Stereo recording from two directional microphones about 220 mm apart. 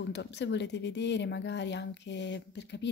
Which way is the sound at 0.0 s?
50° left (ahead or behind).